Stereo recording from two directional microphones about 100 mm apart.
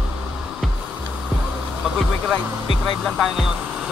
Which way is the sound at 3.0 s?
5° right (ahead or behind).